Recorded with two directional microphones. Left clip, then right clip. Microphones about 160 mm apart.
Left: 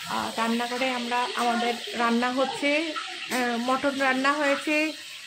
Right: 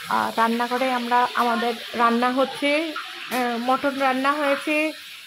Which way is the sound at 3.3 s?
20° right (ahead or behind).